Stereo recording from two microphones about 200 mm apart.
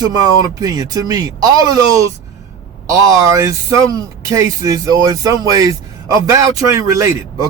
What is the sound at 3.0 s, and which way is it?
Speech, 15° right (ahead or behind).